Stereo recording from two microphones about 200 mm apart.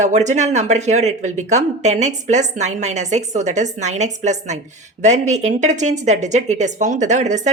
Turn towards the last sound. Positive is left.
turn(degrees=-35)  # may be behind; listen again after turning